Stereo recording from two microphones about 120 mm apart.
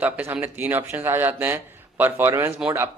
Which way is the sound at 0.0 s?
15° right (ahead or behind).